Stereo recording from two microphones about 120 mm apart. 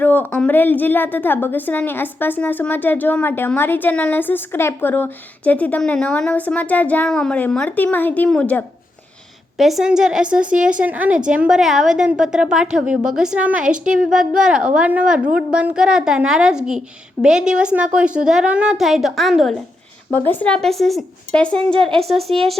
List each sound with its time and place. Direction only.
0.0 s a woman's voice: 15° left (ahead or behind)
9.6 s a woman's voice: centre (ahead or behind)
20.1 s a woman's voice: 15° left (ahead or behind)